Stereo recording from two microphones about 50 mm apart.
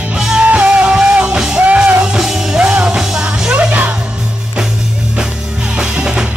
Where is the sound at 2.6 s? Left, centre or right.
Right.